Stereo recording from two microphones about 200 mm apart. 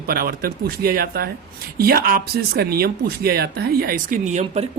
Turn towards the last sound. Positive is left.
turn(degrees=-35)  # may be behind; listen again after turning